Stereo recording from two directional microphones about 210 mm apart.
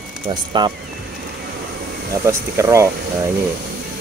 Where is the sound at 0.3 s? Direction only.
20° right (ahead or behind).